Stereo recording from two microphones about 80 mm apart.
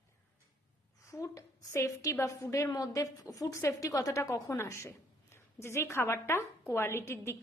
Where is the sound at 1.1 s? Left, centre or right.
Left.